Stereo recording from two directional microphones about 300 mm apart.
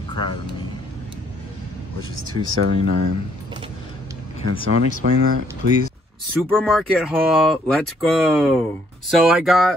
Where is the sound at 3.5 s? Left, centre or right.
Centre.